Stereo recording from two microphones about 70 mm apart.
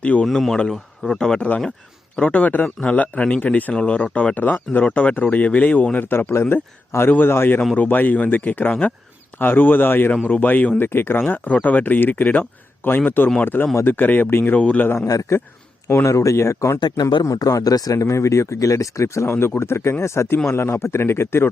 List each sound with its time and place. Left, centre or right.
0.0 s speech: centre
0.3 s a man's voice: centre; by 14.6 s left
14.6 s a man's voice: centre
15.0 s a man's voice: left
16.8 s speech: left
17.2 s speech: left